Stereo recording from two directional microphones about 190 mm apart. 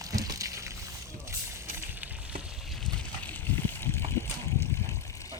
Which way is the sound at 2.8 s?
5° left (ahead or behind).